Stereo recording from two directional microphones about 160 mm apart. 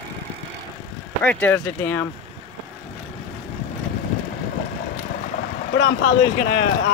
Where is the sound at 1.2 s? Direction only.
10° left (ahead or behind).